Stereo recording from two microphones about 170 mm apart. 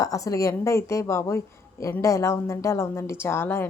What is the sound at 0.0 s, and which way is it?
A woman's voice, 20° left (ahead or behind).